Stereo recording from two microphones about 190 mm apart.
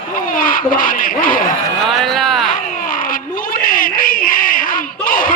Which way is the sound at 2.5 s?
45° left (ahead or behind).